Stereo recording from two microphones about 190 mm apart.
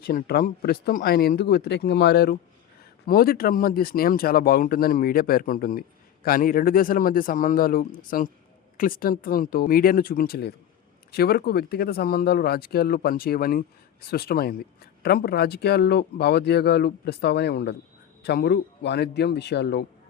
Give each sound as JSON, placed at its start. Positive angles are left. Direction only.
{"t": 0.0, "sound": "speech", "side_deg": 50}